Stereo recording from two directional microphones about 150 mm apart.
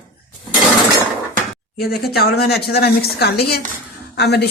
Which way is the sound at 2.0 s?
90° left.